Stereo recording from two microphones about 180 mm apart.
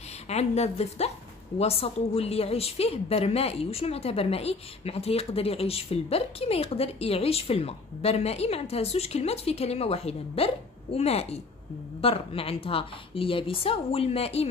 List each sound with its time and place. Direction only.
0.3 s a woman's voice: 35° left (ahead or behind)